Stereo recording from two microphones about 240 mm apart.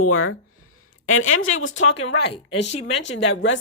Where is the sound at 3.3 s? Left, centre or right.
Left.